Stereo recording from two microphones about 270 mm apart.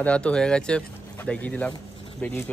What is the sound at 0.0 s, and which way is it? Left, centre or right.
A man's voice, centre.